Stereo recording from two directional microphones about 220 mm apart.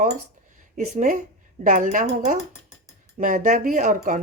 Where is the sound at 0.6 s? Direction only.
35° right (ahead or behind).